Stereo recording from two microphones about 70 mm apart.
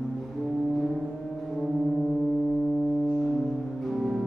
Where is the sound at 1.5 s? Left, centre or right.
Centre.